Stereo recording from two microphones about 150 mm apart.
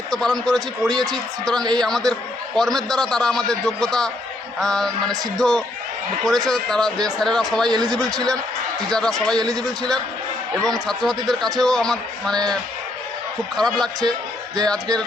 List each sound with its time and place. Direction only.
0.1 s a man's voice: 5° left (ahead or behind)
13.6 s a man's voice: 5° left (ahead or behind)